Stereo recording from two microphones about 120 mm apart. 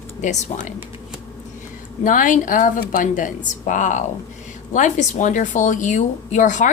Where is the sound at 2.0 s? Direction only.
90° left.